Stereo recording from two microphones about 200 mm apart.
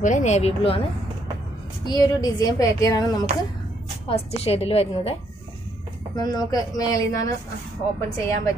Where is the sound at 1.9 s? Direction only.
20° left (ahead or behind).